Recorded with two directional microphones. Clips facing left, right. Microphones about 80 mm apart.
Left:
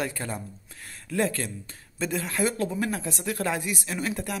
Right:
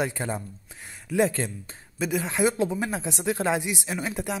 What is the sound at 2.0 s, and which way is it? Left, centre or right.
Speech, centre.